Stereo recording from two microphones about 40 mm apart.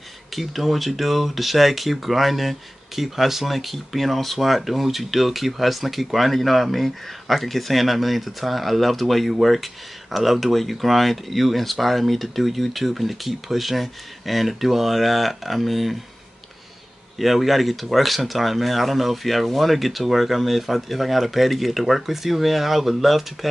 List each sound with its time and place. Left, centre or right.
0.3 s speech: centre
17.2 s speech: centre